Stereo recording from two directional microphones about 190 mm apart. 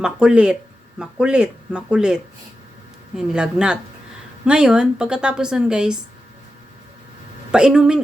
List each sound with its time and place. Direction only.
0.0 s a woman's voice: 5° right (ahead or behind)
3.2 s a woman's voice: 5° right (ahead or behind)
7.5 s a woman's voice: 5° right (ahead or behind)